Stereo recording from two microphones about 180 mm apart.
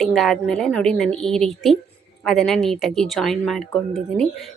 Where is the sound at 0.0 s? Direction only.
Centre (ahead or behind).